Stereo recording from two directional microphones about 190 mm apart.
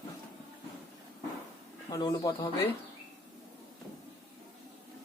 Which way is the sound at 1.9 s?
25° left (ahead or behind).